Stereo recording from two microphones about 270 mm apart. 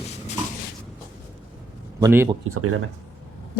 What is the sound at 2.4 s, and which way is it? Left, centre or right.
Speech, right.